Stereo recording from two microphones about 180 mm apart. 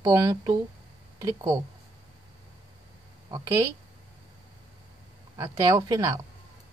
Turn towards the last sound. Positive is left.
turn(degrees=-20)  # may be behind; listen again after turning